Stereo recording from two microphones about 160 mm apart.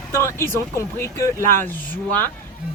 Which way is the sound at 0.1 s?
15° left (ahead or behind).